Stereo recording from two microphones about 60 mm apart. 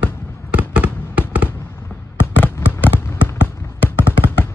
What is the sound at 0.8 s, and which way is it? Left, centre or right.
Fireworks, left.